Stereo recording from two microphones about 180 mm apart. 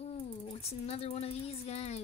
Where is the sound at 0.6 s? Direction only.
35° left (ahead or behind).